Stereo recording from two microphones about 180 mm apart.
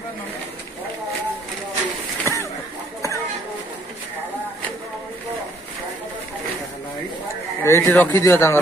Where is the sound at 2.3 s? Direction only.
15° left (ahead or behind).